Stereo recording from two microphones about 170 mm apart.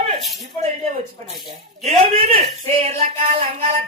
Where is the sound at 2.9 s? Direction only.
55° right (ahead or behind).